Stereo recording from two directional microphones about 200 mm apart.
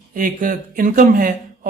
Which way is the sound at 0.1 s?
45° right (ahead or behind).